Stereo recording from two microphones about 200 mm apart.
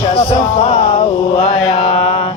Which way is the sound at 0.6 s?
30° left (ahead or behind).